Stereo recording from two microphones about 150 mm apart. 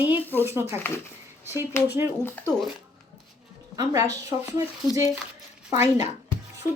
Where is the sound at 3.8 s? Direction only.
25° right (ahead or behind).